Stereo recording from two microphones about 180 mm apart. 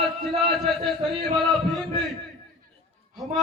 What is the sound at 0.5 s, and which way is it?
Speech, centre (ahead or behind).